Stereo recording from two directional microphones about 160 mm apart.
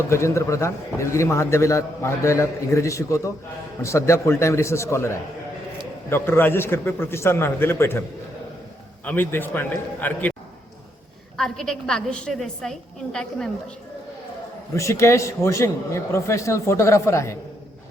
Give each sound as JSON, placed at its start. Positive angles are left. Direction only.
{"t": 0.1, "sound": "a man's voice", "side_deg": 20}
{"t": 9.0, "sound": "a man's voice", "side_deg": 15}
{"t": 11.3, "sound": "a woman's voice", "side_deg": 5}
{"t": 14.8, "sound": "a man's voice", "side_deg": 20}